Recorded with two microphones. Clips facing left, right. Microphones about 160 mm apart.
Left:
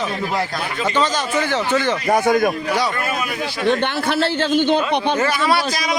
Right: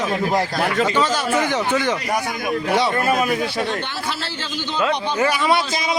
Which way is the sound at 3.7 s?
60° left (ahead or behind).